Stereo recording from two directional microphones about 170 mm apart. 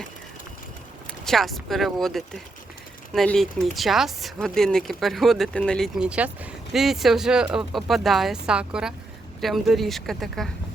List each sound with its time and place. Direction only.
1.2 s speech: centre (ahead or behind)